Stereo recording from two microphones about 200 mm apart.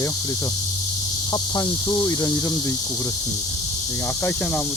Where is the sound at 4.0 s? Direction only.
10° left (ahead or behind).